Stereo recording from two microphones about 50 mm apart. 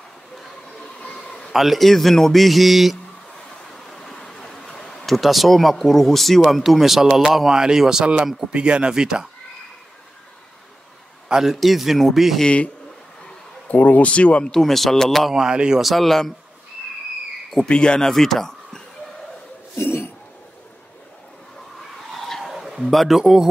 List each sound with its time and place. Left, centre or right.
0.4 s train: centre
0.9 s a sound: centre
1.5 s speech: centre
3.6 s speech: centre
11.2 s a man's voice: centre
11.5 s speech: centre
13.7 s speech: left
14.5 s speech: centre
15.3 s speech: centre
15.8 s speech: centre
17.6 s speech: centre
18.0 s speech: centre
19.8 s cough: left
22.1 s a sound: centre